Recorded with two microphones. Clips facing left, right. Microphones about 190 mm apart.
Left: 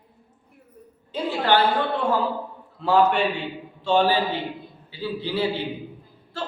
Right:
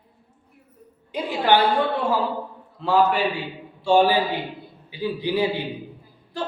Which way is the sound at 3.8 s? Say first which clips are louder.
Right 2 dB; 10° right (ahead or behind).